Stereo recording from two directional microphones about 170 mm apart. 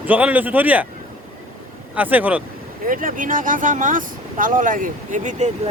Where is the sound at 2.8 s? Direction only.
55° right (ahead or behind).